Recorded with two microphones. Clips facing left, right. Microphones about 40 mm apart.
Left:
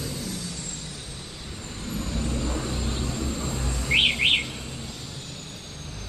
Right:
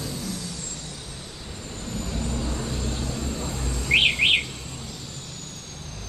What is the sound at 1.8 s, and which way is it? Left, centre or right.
Vehicle, centre.